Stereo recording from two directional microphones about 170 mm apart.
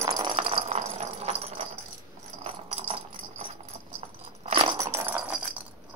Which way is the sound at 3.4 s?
35° right (ahead or behind).